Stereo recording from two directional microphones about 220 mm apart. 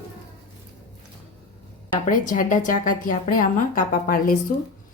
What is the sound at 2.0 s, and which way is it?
A woman's voice, 35° left (ahead or behind).